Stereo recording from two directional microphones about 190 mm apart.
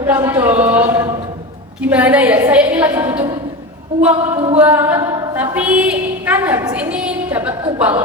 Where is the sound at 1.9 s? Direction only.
5° right (ahead or behind).